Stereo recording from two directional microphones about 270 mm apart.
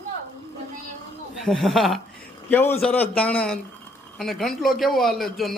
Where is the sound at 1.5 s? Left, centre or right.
Centre.